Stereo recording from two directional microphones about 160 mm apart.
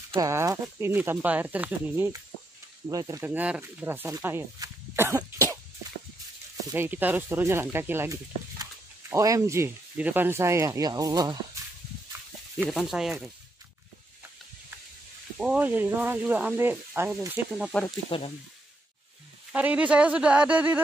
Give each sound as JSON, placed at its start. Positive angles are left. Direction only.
{"t": 0.1, "sound": "speech", "side_deg": -15}
{"t": 6.7, "sound": "speech", "side_deg": -10}
{"t": 12.6, "sound": "speech", "side_deg": 0}
{"t": 15.3, "sound": "speech", "side_deg": -5}
{"t": 17.6, "sound": "speech", "side_deg": 0}
{"t": 18.1, "sound": "speech", "side_deg": 35}
{"t": 19.5, "sound": "speech", "side_deg": -10}